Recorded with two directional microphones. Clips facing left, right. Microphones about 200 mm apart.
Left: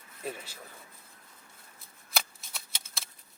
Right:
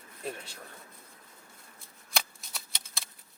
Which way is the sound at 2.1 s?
Centre (ahead or behind).